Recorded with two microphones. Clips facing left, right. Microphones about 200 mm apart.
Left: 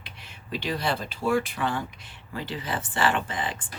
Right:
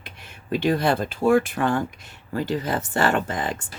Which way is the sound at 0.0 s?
50° right (ahead or behind).